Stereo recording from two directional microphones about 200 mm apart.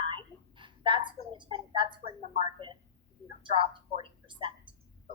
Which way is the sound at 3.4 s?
25° right (ahead or behind).